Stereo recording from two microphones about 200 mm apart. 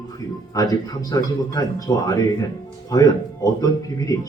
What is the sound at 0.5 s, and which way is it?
Speech, 20° left (ahead or behind).